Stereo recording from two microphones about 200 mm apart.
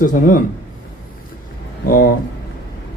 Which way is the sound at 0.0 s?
45° left (ahead or behind).